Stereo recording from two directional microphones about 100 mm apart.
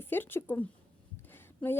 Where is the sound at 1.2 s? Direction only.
20° left (ahead or behind).